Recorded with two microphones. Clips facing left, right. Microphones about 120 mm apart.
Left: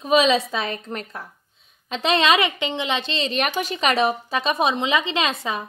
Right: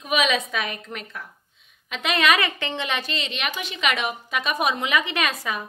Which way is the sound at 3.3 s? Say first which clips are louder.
Left 7 dB; 40° left (ahead or behind).